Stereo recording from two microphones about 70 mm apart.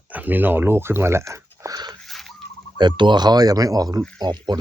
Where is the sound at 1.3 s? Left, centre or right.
Right.